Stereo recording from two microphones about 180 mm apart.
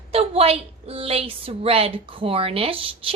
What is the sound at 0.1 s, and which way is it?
A woman's voice, 35° right (ahead or behind).